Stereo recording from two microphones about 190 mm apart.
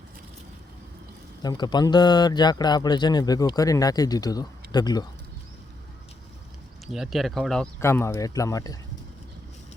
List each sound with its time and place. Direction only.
1.4 s a man's voice: 20° left (ahead or behind)
6.8 s speech: centre (ahead or behind)
7.8 s speech: 15° left (ahead or behind)